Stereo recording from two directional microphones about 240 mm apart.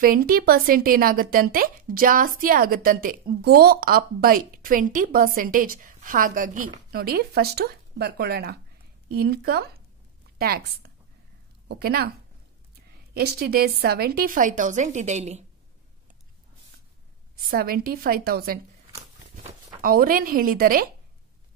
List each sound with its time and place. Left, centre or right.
0.0 s a woman's voice: right
13.1 s a woman's voice: right
17.5 s a woman's voice: right
19.8 s a woman's voice: right